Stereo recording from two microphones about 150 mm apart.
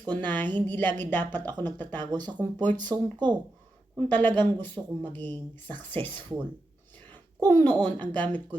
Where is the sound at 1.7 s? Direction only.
10° left (ahead or behind).